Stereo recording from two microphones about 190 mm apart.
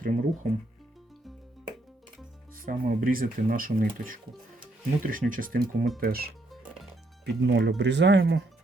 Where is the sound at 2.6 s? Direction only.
50° right (ahead or behind).